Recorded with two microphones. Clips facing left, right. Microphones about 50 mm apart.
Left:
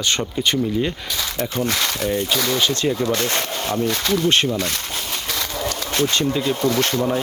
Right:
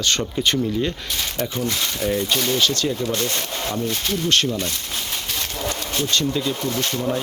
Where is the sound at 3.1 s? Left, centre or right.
Left.